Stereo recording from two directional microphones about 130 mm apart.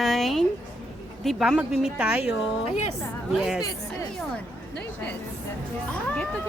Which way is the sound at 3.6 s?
25° left (ahead or behind).